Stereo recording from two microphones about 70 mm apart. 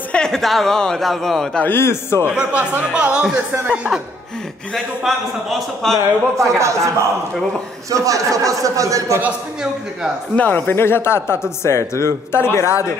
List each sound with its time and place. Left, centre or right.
0.1 s speech: centre
1.6 s speech: left
2.3 s speech: centre
4.7 s speech: centre
6.3 s a man's voice: right
7.9 s a man's voice: right
10.3 s speech: left